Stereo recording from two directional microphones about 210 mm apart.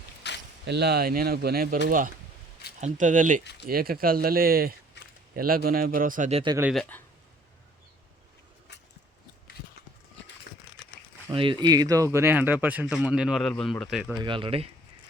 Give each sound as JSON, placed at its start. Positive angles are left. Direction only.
{"t": 0.2, "sound": "a sound", "side_deg": 55}
{"t": 0.6, "sound": "speech", "side_deg": -50}
{"t": 6.4, "sound": "speech", "side_deg": -20}
{"t": 6.7, "sound": "speech", "side_deg": 5}
{"t": 11.3, "sound": "speech", "side_deg": -25}
{"t": 14.2, "sound": "speech", "side_deg": -25}